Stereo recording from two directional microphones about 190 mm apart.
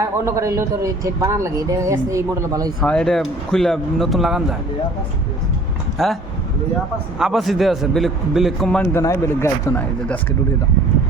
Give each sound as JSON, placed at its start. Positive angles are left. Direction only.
{"t": 0.0, "sound": "speech", "side_deg": -15}
{"t": 2.8, "sound": "a man's voice", "side_deg": 5}
{"t": 6.0, "sound": "a man's voice", "side_deg": 0}
{"t": 7.2, "sound": "a man's voice", "side_deg": 0}